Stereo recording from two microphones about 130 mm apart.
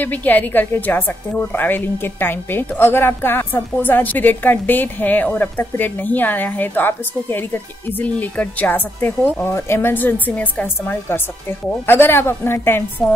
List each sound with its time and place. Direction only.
0.0 s a woman's voice: 15° left (ahead or behind)
13.0 s a woman's voice: centre (ahead or behind)